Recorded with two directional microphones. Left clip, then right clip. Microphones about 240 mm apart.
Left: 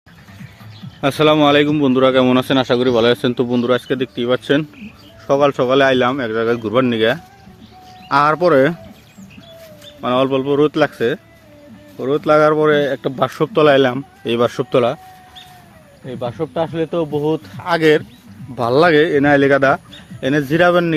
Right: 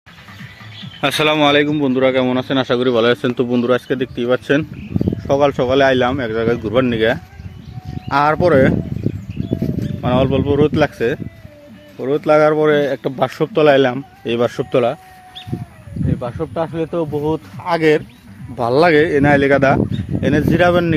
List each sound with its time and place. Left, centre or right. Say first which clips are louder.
1.0 s speech: left 1 dB; centre; by 2.3 s left
2.5 s speech: left 1 dB; centre
10.0 s speech: left 1 dB; centre
16.2 s speech: left 3 dB; centre